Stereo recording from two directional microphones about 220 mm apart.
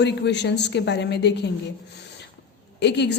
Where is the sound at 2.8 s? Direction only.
50° left (ahead or behind).